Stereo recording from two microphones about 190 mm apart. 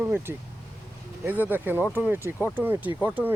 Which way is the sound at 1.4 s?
10° right (ahead or behind).